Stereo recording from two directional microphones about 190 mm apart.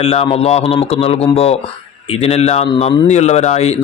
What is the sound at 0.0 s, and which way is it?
Speech, 30° left (ahead or behind).